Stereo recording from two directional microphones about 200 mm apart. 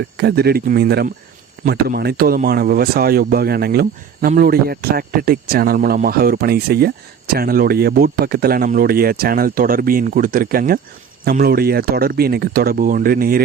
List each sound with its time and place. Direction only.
0.2 s speech: 55° right (ahead or behind)